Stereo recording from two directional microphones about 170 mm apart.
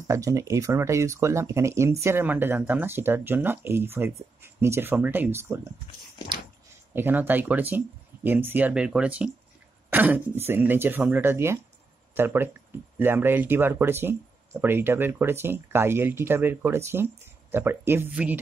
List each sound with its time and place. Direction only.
0.1 s speech: 20° right (ahead or behind)
6.9 s speech: 10° right (ahead or behind)